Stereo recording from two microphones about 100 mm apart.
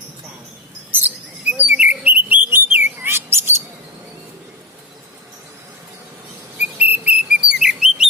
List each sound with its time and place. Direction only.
0.9 s bird: 20° right (ahead or behind)
6.6 s whistle: 15° right (ahead or behind)